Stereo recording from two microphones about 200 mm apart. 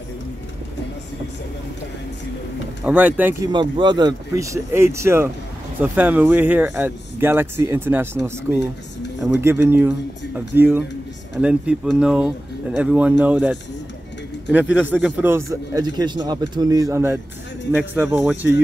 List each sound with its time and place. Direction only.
2.8 s speech: 5° right (ahead or behind)
3.5 s speech: 25° right (ahead or behind)